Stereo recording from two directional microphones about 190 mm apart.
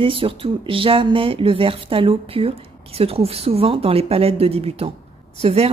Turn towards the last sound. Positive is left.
turn(degrees=-30)  # may be behind; listen again after turning